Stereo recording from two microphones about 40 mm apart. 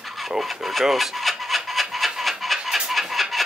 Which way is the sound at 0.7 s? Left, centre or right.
Centre.